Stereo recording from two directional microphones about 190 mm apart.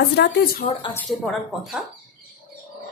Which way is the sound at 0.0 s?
60° left (ahead or behind).